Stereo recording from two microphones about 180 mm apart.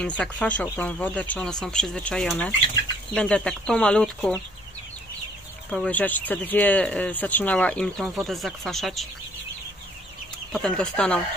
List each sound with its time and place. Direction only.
0.0 s speech: 5° left (ahead or behind)
5.7 s speech: 5° left (ahead or behind)
10.5 s speech: 5° left (ahead or behind)